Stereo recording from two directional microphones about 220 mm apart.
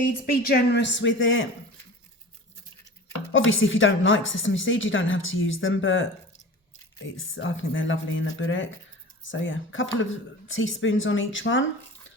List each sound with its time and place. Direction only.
0.1 s a woman's voice: 45° left (ahead or behind); by 1.5 s 60° left (ahead or behind)
3.3 s a woman's voice: 60° left (ahead or behind)